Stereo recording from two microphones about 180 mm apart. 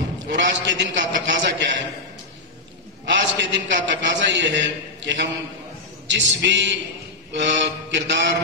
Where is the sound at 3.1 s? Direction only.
75° right (ahead or behind).